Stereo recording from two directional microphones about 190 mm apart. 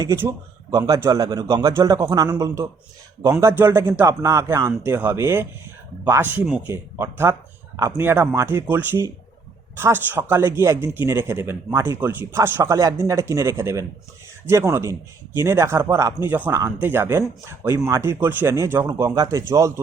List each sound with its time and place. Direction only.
0.0 s speech: 15° right (ahead or behind)